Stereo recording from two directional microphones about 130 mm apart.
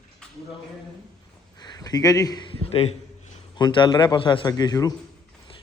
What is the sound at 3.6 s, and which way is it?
A man's voice, 35° left (ahead or behind).